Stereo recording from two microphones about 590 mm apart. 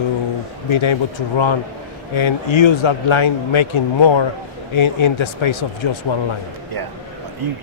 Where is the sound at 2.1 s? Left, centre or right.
Left.